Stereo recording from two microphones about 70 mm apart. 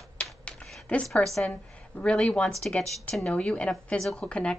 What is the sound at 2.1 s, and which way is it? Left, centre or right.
Speech, centre.